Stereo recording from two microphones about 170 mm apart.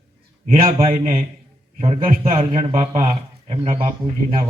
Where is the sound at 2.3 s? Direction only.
30° right (ahead or behind).